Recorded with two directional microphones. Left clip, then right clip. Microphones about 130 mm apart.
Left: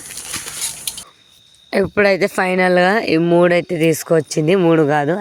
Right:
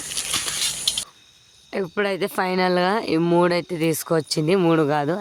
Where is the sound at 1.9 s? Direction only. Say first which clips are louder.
Left 9 dB; 40° left (ahead or behind).